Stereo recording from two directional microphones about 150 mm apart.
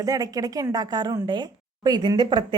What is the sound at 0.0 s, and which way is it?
Speech, 25° right (ahead or behind).